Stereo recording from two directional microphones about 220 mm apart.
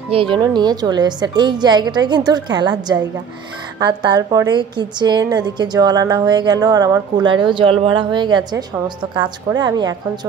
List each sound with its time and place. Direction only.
0.1 s a woman's voice: 25° right (ahead or behind)